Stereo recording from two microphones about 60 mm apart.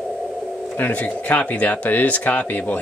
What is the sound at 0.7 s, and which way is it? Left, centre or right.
Speech, left.